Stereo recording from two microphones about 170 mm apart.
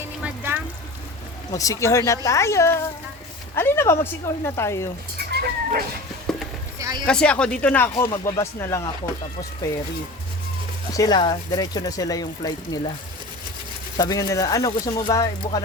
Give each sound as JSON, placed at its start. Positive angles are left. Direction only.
{"t": 0.2, "sound": "a sound", "side_deg": -10}
{"t": 1.5, "sound": "speech", "side_deg": 20}
{"t": 5.3, "sound": "cat", "side_deg": -65}
{"t": 6.7, "sound": "a sound", "side_deg": -20}
{"t": 7.0, "sound": "speech", "side_deg": 5}
{"t": 10.9, "sound": "speech", "side_deg": 25}
{"t": 14.0, "sound": "speech", "side_deg": 20}